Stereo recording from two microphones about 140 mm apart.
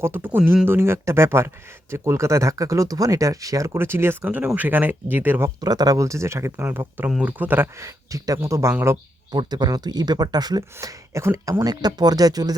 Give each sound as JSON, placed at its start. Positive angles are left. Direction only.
{"t": 0.0, "sound": "speech", "side_deg": -15}
{"t": 5.5, "sound": "speech", "side_deg": -30}
{"t": 9.3, "sound": "speech", "side_deg": -30}
{"t": 11.6, "sound": "speech", "side_deg": -30}